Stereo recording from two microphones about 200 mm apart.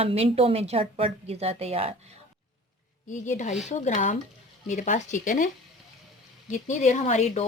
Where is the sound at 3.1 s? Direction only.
35° left (ahead or behind).